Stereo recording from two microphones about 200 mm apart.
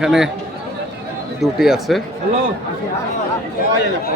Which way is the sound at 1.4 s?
Centre (ahead or behind).